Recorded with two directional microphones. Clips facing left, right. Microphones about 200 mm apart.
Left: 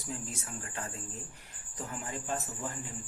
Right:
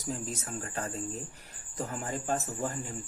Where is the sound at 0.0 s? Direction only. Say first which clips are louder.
Right 5 dB; 40° right (ahead or behind).